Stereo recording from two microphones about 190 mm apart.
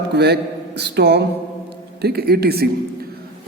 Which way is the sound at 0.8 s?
60° right (ahead or behind).